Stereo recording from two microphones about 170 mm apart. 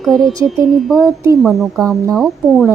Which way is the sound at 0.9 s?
20° right (ahead or behind).